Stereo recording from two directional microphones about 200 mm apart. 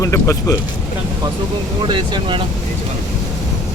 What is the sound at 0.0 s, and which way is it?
Speech, 15° left (ahead or behind).